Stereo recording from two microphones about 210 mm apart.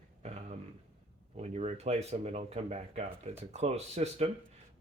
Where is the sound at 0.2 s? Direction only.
35° right (ahead or behind).